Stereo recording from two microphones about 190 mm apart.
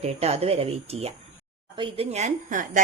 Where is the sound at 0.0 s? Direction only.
35° right (ahead or behind).